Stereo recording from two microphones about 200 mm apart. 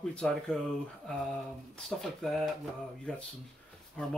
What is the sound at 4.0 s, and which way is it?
Speech, 5° left (ahead or behind).